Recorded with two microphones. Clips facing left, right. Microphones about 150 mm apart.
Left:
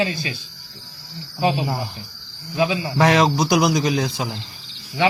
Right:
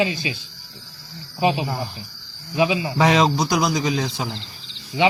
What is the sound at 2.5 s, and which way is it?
Speech, 15° right (ahead or behind).